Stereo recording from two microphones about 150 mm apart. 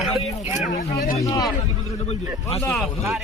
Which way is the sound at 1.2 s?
20° left (ahead or behind).